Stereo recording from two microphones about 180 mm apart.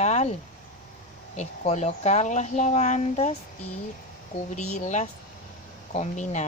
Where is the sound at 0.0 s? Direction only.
40° left (ahead or behind).